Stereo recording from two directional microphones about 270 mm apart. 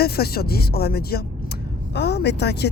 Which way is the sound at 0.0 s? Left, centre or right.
Left.